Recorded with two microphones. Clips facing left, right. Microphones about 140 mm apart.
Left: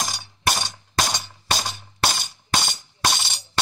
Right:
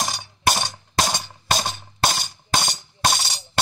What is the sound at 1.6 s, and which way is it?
Music, 30° right (ahead or behind).